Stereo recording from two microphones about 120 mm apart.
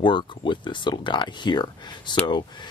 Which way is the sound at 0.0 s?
40° left (ahead or behind).